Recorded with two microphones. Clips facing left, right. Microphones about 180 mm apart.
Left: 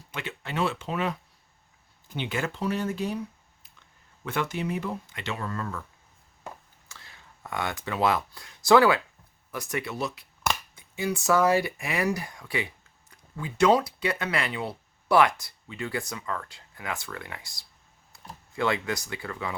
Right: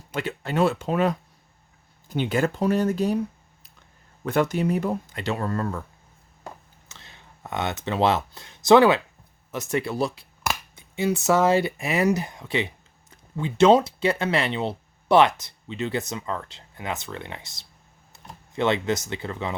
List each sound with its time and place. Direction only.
0.1 s speech: 40° right (ahead or behind)
6.8 s speech: 20° right (ahead or behind)